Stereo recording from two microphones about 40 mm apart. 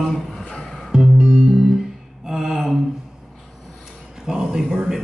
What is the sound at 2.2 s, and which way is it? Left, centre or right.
Mantra, centre.